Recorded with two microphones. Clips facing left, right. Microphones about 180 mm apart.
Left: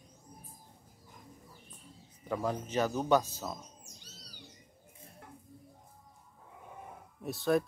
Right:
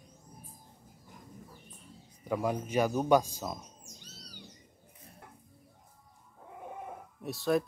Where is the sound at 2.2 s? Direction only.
10° right (ahead or behind).